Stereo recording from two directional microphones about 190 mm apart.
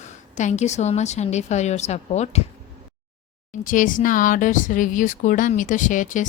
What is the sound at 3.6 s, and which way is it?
Speech, 45° left (ahead or behind).